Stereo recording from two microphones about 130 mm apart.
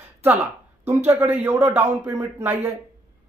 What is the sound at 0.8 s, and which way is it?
A man's voice, 20° right (ahead or behind).